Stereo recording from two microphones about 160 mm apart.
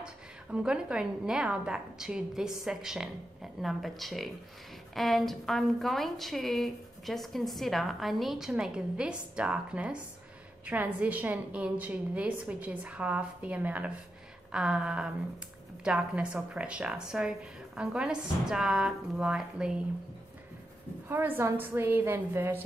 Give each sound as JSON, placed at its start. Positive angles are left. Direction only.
{"t": 0.0, "sound": "a woman's voice", "side_deg": -5}
{"t": 21.1, "sound": "a woman's voice", "side_deg": -10}